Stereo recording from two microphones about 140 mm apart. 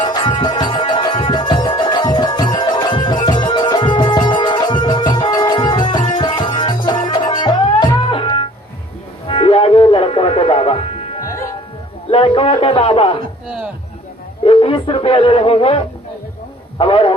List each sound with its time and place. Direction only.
0.0 s music: 30° left (ahead or behind)
11.3 s music: 20° left (ahead or behind)
12.1 s speech: 40° left (ahead or behind)
14.4 s speech: 40° left (ahead or behind)
16.7 s a sound: 40° left (ahead or behind)